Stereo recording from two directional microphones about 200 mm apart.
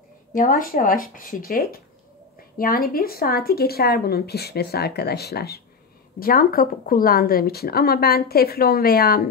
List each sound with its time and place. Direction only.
0.3 s a woman's voice: 45° left (ahead or behind)